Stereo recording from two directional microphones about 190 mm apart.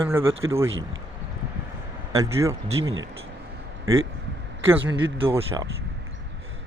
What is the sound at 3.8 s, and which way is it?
Speech, 90° right.